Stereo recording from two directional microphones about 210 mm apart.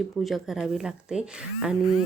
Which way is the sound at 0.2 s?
Centre (ahead or behind).